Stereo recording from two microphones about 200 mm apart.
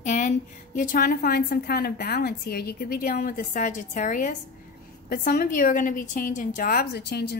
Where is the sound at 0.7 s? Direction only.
45° left (ahead or behind).